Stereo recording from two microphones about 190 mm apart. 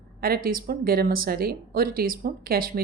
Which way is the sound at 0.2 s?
50° right (ahead or behind).